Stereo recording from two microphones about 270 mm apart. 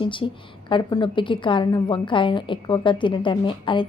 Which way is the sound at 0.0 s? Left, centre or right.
Centre.